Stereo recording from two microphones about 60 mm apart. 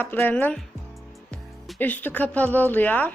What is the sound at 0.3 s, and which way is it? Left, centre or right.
Speech, left.